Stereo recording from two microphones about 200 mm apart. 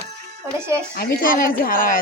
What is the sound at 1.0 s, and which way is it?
Speech, 45° left (ahead or behind).